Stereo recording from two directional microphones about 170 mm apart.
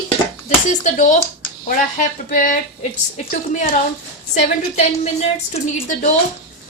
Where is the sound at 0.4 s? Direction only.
45° left (ahead or behind).